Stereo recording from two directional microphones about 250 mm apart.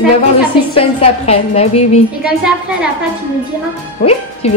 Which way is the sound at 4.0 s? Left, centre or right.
Left.